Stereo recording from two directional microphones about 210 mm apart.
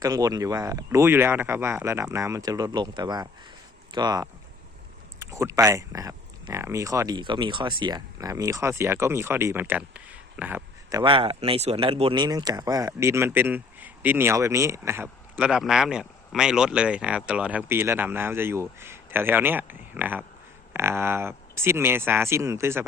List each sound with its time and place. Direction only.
0.0 s speech: 15° right (ahead or behind)